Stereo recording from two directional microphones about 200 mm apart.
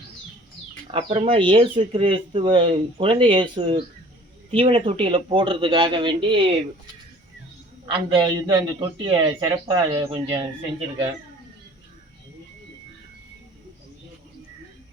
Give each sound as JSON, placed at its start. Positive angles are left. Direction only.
{"t": 0.9, "sound": "speech", "side_deg": -30}
{"t": 7.9, "sound": "speech", "side_deg": -20}